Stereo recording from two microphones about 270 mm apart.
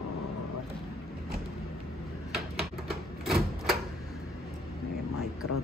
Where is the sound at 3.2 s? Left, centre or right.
Centre.